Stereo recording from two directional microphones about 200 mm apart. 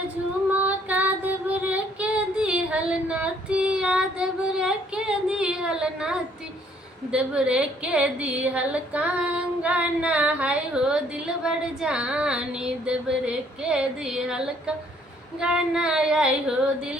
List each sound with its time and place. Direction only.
0.6 s child singing: 10° right (ahead or behind)
7.1 s a woman's voice: 5° right (ahead or behind)